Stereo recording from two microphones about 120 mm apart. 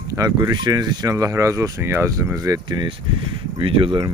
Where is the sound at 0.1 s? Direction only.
30° right (ahead or behind).